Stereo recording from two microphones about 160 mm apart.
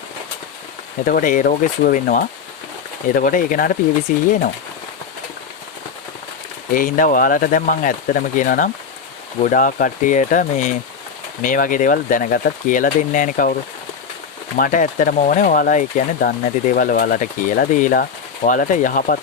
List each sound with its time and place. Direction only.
1.0 s speech: 60° left (ahead or behind)
6.7 s speech: 60° left (ahead or behind)